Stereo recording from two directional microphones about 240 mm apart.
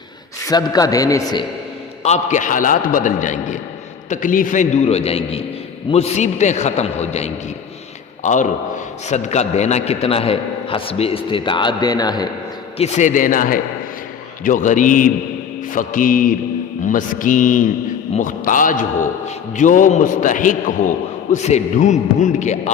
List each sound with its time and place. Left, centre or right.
0.4 s a man's voice: centre
2.0 s a man's voice: left
12.8 s a man's voice: left